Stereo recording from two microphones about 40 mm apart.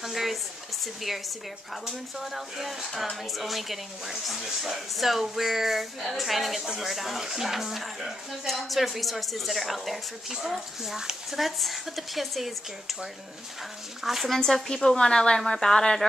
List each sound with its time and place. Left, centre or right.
0.0 s speech: centre
1.9 s speech: centre
14.4 s a woman's voice: centre